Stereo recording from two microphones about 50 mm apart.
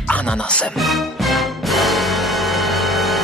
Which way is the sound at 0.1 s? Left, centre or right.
Left.